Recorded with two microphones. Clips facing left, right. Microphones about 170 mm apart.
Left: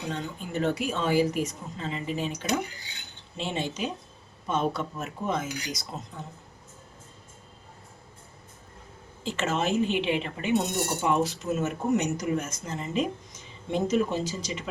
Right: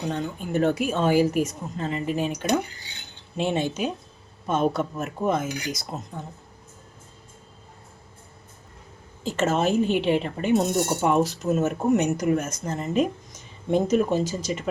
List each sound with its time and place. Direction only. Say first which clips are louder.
0.1 s speech: right 5 dB; 50° right (ahead or behind)
9.2 s speech: right 5 dB; 45° right (ahead or behind)